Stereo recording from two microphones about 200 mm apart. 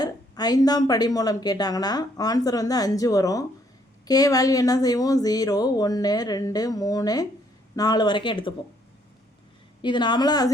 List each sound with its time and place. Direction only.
0.0 s speech: 20° left (ahead or behind)
9.8 s speech: 20° left (ahead or behind)